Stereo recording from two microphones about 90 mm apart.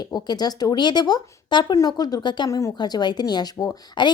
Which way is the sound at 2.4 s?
35° left (ahead or behind).